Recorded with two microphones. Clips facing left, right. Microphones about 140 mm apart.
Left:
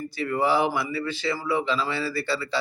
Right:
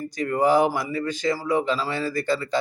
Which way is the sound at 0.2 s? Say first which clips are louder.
Right 4 dB; 40° right (ahead or behind).